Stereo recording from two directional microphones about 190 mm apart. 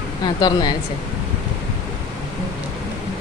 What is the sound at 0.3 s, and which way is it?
Speech, 20° left (ahead or behind).